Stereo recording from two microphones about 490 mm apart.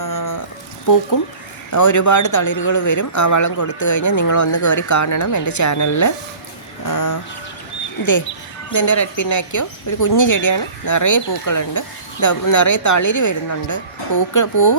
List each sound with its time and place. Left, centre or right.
0.0 s a sound: left
1.7 s speech: left
8.7 s speech: left